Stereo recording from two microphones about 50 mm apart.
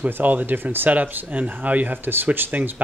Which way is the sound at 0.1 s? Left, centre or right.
Right.